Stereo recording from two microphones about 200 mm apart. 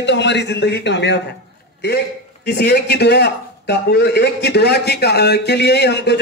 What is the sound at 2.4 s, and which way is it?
Speech, 55° left (ahead or behind).